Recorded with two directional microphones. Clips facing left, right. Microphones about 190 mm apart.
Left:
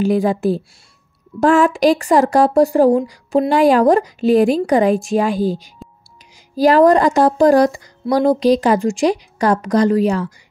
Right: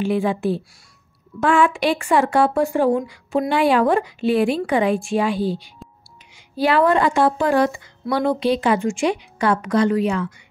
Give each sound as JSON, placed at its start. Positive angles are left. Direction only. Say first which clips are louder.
{"t": 0.0, "sound": "speech", "louder": "left 4 dB", "side_deg": 40}